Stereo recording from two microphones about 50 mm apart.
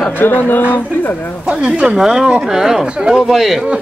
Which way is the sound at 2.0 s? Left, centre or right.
Centre.